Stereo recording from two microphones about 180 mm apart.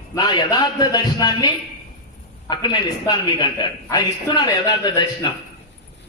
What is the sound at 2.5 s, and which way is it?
A man's voice, 25° left (ahead or behind).